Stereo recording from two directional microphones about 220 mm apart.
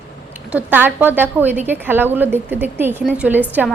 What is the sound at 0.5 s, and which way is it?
A woman's voice, 10° right (ahead or behind).